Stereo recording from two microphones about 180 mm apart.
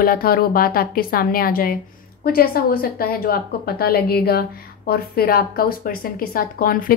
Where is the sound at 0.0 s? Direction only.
55° left (ahead or behind).